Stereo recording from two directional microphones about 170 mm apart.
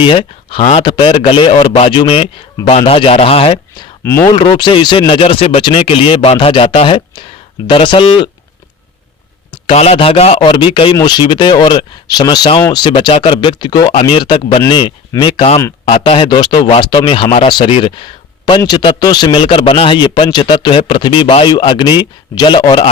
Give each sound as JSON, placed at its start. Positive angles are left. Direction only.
{"t": 0.0, "sound": "speech", "side_deg": 30}
{"t": 4.0, "sound": "speech", "side_deg": 15}
{"t": 4.4, "sound": "speech", "side_deg": 25}
{"t": 9.6, "sound": "speech", "side_deg": 35}